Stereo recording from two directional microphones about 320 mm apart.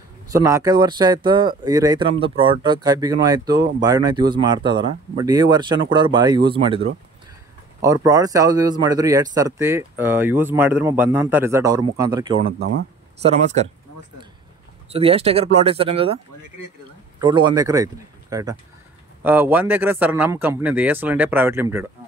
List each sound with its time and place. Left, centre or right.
0.3 s speech: centre
7.8 s speech: centre
14.9 s speech: centre
17.2 s a man's voice: centre